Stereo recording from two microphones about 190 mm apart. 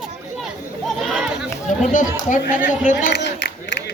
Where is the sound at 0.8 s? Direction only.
Centre (ahead or behind).